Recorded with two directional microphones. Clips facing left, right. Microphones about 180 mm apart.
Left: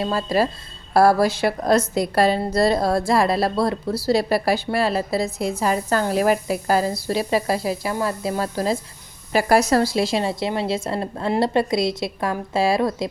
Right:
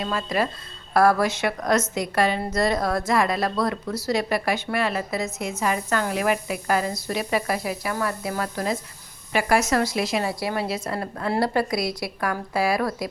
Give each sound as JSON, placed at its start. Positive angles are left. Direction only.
{"t": 0.0, "sound": "a woman's voice", "side_deg": 30}